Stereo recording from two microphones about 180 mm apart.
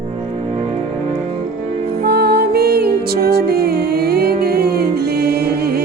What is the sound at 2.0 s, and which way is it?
Music, 65° right (ahead or behind).